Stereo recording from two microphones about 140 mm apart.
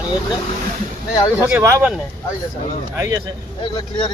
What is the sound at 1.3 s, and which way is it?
Speech, 15° right (ahead or behind).